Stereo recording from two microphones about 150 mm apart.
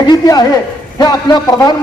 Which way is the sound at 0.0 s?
30° left (ahead or behind).